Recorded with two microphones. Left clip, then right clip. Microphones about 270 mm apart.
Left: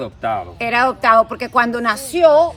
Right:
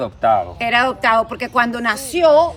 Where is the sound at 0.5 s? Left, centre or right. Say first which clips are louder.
Even; centre.